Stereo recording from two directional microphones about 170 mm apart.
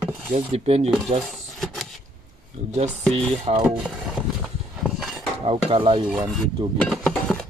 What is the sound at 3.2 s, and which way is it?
Wood, 35° right (ahead or behind).